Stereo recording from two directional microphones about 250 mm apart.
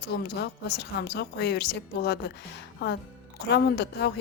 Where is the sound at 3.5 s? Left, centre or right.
Left.